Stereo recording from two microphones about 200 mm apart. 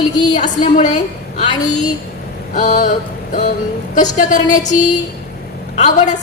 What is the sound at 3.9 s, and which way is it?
A woman's voice, 40° left (ahead or behind).